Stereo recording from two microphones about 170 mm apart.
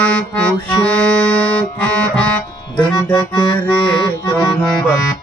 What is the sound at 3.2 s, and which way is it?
Accordion, 25° left (ahead or behind).